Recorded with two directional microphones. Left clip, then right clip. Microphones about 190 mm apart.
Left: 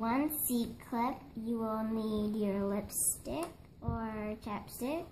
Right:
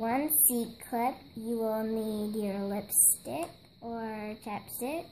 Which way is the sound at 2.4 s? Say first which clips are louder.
Right 1 dB; 40° right (ahead or behind).